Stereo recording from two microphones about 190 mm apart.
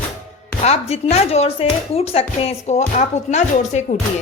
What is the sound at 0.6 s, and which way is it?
Speech, 35° left (ahead or behind).